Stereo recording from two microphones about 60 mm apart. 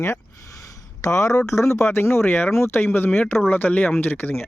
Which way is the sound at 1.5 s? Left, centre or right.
Left.